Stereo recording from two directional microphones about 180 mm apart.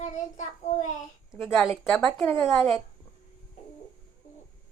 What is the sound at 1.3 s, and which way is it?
Speech, centre (ahead or behind).